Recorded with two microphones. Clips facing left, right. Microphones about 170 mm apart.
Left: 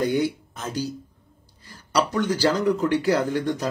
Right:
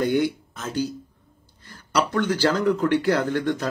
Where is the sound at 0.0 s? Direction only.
40° left (ahead or behind).